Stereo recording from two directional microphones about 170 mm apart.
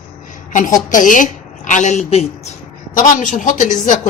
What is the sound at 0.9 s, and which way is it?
A woman's voice, 50° left (ahead or behind).